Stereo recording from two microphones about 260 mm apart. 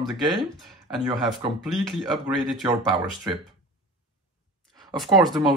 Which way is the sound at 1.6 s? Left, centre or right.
Centre.